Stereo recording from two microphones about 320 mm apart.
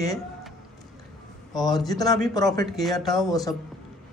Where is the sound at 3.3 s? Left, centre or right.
Centre.